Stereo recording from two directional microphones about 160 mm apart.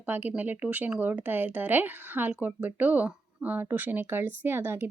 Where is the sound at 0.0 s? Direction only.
10° right (ahead or behind).